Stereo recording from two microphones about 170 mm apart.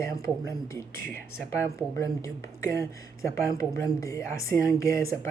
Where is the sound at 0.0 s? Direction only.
15° left (ahead or behind).